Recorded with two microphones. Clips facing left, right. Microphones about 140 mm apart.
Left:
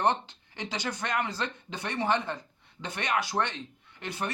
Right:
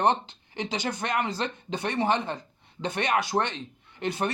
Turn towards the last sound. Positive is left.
turn(degrees=-25)  # may be behind; listen again after turning